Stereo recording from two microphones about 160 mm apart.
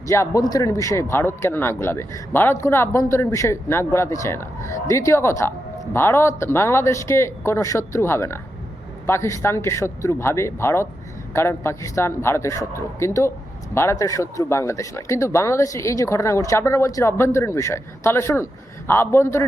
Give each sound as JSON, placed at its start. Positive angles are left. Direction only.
{"t": 0.1, "sound": "a man's voice", "side_deg": 20}